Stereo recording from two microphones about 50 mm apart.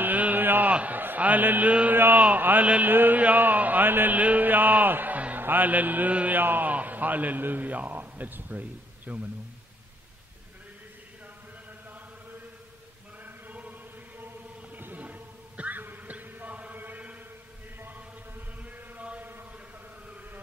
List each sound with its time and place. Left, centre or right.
0.0 s a sound: right
0.7 s a man's voice: right
2.0 s a man's voice: right
2.9 s a sound: right
5.4 s a man's voice: right
13.2 s chant: right
18.6 s chant: right